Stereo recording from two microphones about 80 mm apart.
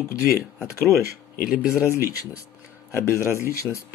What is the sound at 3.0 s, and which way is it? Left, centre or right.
Speech, left.